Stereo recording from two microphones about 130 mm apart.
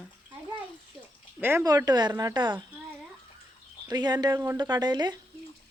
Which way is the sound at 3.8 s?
30° right (ahead or behind).